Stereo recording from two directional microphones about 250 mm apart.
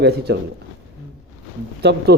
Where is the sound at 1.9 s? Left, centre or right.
Right.